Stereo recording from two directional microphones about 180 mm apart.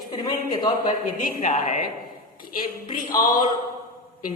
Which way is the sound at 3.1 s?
20° left (ahead or behind).